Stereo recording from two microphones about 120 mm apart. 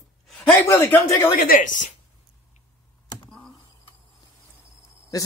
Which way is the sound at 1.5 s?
90° left.